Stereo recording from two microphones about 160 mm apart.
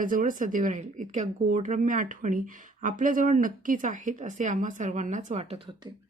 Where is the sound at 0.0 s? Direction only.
55° right (ahead or behind); by 5.9 s 35° right (ahead or behind).